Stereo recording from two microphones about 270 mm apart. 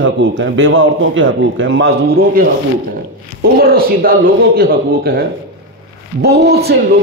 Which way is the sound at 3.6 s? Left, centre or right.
Right.